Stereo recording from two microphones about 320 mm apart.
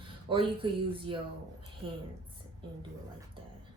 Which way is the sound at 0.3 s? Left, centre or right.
Centre.